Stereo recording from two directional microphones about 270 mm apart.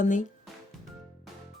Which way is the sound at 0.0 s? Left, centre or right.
Left.